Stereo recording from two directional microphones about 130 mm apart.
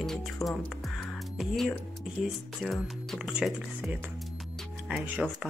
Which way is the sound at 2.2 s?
Centre (ahead or behind).